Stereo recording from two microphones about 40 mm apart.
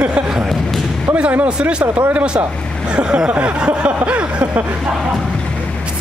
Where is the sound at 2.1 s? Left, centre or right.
Right.